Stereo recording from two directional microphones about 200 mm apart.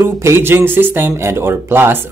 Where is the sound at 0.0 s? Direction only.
15° right (ahead or behind).